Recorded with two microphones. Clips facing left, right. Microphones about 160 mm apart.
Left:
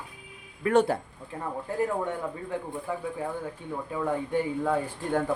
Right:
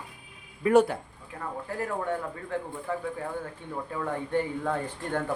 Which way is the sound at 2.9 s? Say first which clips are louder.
Even; 10° left (ahead or behind).